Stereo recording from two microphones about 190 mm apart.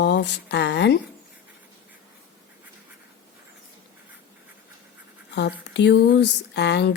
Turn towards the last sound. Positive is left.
turn(degrees=65)  # may be behind; listen again after turning